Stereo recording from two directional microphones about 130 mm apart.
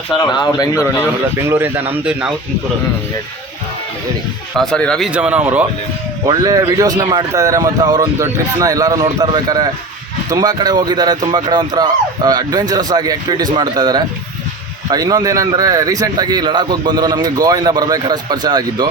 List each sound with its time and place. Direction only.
0.2 s speech: 30° left (ahead or behind)
1.4 s speech: 20° right (ahead or behind)
4.5 s speech: 5° left (ahead or behind)
5.0 s speech: 10° right (ahead or behind)
6.2 s a man's voice: 30° right (ahead or behind)